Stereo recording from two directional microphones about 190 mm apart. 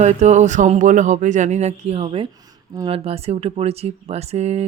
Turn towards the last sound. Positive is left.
turn(degrees=-35)  # may be behind; listen again after turning